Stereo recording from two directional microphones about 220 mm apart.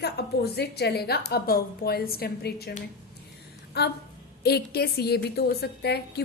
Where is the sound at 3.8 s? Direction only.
50° left (ahead or behind).